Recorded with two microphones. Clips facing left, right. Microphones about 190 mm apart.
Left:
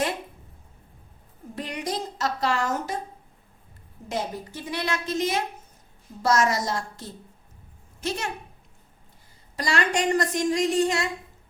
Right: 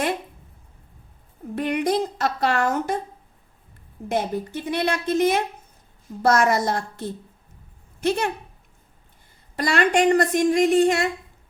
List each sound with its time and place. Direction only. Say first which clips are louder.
1.5 s a woman's voice: right 9 dB; 60° right (ahead or behind)
4.1 s a woman's voice: right 6 dB; 60° right (ahead or behind)
9.6 s a woman's voice: right 6 dB; 60° right (ahead or behind)